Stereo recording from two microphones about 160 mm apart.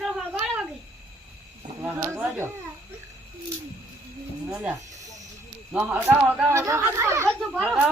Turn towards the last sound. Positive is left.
turn(degrees=0)  # may be behind; listen again after turning